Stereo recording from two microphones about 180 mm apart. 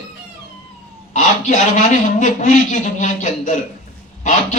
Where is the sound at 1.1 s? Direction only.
40° left (ahead or behind).